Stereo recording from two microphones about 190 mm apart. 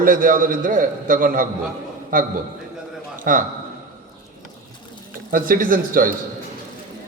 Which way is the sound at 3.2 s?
45° right (ahead or behind).